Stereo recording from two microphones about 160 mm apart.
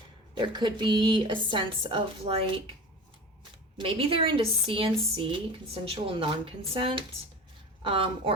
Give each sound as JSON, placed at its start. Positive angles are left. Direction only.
{"t": 0.3, "sound": "speech", "side_deg": -30}
{"t": 3.8, "sound": "speech", "side_deg": -35}